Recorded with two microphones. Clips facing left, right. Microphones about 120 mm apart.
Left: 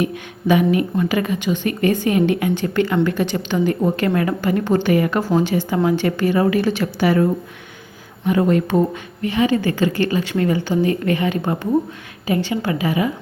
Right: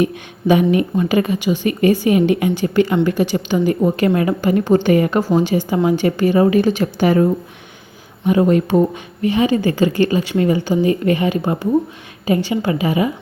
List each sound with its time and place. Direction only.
0.0 s a woman's voice: 20° right (ahead or behind)
4.0 s a woman's voice: 20° right (ahead or behind)